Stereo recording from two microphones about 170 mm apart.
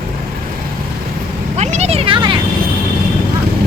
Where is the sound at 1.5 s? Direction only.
40° right (ahead or behind).